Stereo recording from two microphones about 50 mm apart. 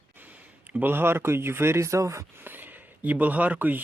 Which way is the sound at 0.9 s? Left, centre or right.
Right.